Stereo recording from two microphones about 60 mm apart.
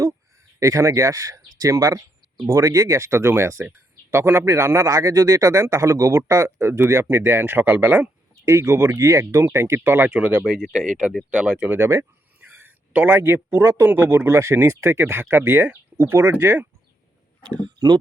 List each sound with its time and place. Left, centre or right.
0.6 s speech: right
8.4 s speech: right
9.0 s speech: right
10.1 s speech: right
10.8 s speech: centre
11.3 s speech: right
12.4 s a sound: right
13.1 s speech: right